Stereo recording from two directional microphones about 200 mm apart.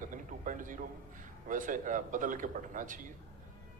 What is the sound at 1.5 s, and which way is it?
A man's voice, 40° right (ahead or behind).